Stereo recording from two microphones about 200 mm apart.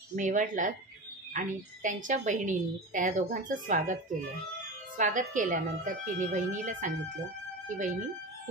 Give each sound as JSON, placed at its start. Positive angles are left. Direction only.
{"t": 0.1, "sound": "a woman's voice", "side_deg": -40}